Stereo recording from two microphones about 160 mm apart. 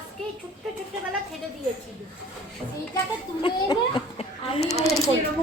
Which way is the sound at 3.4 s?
30° left (ahead or behind).